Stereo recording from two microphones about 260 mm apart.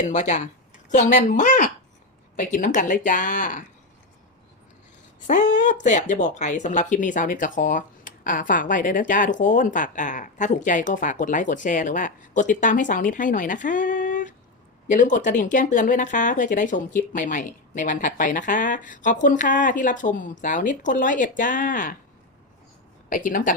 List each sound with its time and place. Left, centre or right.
0.0 s speech: left
5.2 s speech: left
23.0 s speech: left